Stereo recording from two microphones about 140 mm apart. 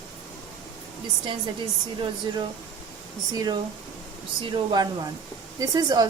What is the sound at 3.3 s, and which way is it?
A woman's voice, 30° right (ahead or behind).